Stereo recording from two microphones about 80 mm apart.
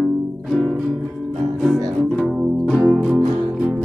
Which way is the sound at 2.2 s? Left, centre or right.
Centre.